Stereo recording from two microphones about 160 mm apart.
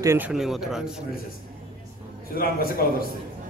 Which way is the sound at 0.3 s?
Centre (ahead or behind).